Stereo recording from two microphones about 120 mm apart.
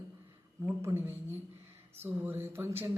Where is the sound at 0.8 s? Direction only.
20° right (ahead or behind).